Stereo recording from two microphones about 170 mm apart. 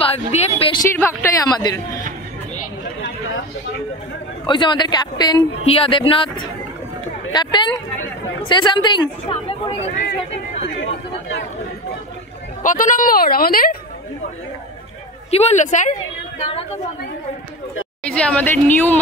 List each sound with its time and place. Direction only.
0.0 s speech: 35° left (ahead or behind)
0.9 s speech: 20° left (ahead or behind)
4.5 s speech: 25° left (ahead or behind)
5.6 s speech: 35° left (ahead or behind)
12.6 s a woman's voice: 50° left (ahead or behind)
15.3 s a woman's voice: 40° left (ahead or behind)
18.0 s speech: 5° left (ahead or behind)